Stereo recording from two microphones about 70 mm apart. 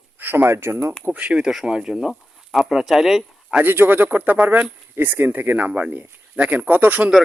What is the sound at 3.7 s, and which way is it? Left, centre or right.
Speech, right.